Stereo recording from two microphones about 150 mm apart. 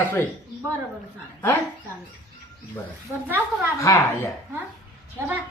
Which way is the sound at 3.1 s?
15° right (ahead or behind).